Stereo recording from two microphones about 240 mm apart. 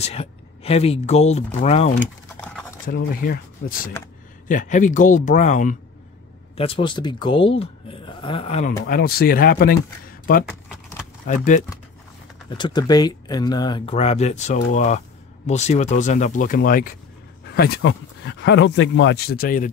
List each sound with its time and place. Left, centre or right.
0.0 s speech: left
3.2 s speech: left
8.8 s speech: left
10.4 s a sound: centre
11.2 s speech: left
12.4 s speech: centre; by 19.7 s left